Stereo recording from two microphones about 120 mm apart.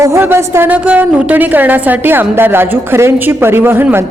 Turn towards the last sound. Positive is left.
turn(degrees=-20)  # may be behind; listen again after turning